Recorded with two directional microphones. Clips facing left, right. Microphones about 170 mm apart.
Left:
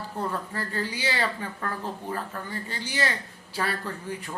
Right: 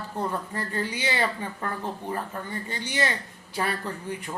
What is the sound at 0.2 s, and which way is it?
Speech, 20° right (ahead or behind).